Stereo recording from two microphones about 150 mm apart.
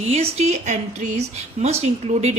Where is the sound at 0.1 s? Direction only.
45° right (ahead or behind).